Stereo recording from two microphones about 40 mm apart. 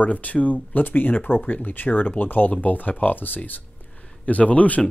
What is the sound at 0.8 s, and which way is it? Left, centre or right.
Speech, left.